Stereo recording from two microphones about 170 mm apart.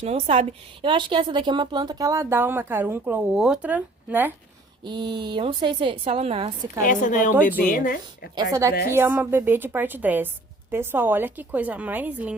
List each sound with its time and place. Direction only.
0.0 s a woman's voice: 35° right (ahead or behind); by 4.3 s 10° right (ahead or behind)
4.8 s a woman's voice: 25° right (ahead or behind)
6.8 s a woman's voice: 50° left (ahead or behind)
8.4 s a woman's voice: 20° right (ahead or behind)